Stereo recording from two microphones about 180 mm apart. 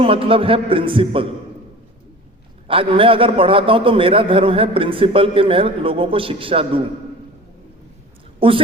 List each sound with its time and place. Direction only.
0.0 s a man's voice: 30° right (ahead or behind)
2.6 s a man's voice: 30° right (ahead or behind)
8.4 s a woman's voice: 30° right (ahead or behind)